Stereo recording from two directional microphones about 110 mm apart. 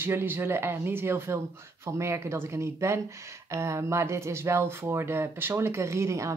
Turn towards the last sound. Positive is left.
turn(degrees=-25)  # may be behind; listen again after turning